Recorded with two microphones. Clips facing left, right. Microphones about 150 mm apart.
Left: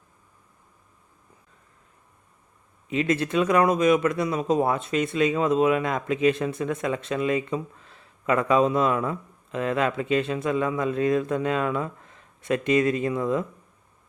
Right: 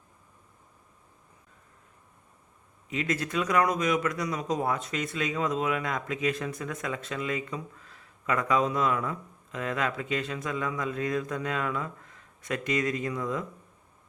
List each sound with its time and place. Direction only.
2.9 s speech: 25° left (ahead or behind)